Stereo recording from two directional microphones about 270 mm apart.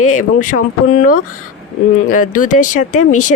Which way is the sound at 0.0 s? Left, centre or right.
Left.